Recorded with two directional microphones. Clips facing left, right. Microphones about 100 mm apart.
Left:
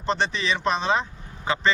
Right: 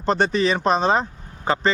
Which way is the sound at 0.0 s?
45° right (ahead or behind).